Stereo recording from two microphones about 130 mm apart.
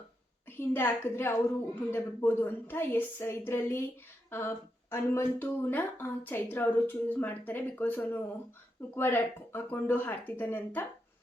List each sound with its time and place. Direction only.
0.6 s speech: 15° left (ahead or behind)